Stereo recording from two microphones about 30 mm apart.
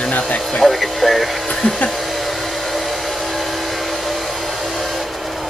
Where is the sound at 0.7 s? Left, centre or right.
Centre.